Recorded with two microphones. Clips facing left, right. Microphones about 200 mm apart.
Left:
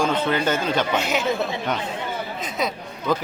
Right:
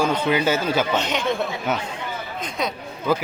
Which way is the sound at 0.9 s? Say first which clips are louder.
Even; 5° left (ahead or behind).